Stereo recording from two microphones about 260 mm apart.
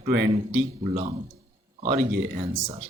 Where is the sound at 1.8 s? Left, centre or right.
Right.